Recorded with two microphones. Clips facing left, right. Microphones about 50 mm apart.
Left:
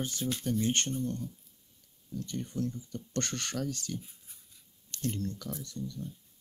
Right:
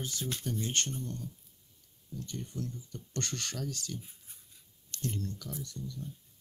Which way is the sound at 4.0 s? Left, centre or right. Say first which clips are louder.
Even; right.